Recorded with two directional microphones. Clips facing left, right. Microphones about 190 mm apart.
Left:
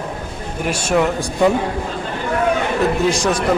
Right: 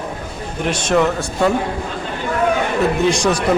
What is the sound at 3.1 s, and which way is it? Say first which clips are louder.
Speech: right 1 dB; centre (ahead or behind).